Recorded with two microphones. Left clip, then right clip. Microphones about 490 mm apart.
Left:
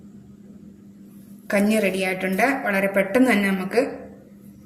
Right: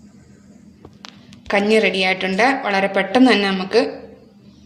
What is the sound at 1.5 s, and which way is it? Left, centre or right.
A woman's voice, left.